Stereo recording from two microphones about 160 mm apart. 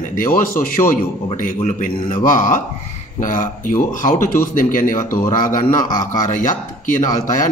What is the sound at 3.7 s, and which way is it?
Speech, 15° left (ahead or behind).